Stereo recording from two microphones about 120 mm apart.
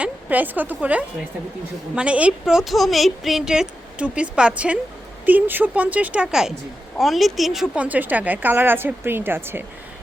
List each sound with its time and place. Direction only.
0.0 s speech: 15° right (ahead or behind)
7.9 s speech: 15° right (ahead or behind)